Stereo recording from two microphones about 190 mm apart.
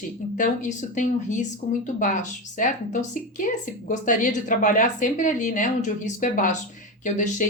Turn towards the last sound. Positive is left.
turn(degrees=45)  # may be behind; listen again after turning